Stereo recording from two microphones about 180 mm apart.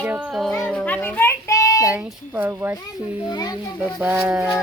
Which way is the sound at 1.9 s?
10° right (ahead or behind).